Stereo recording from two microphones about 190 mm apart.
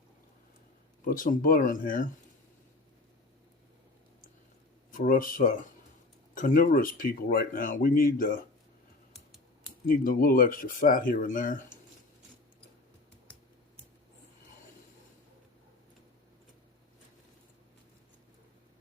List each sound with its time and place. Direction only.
1.0 s speech: 45° left (ahead or behind)
4.9 s speech: 45° left (ahead or behind)
9.8 s speech: 50° left (ahead or behind)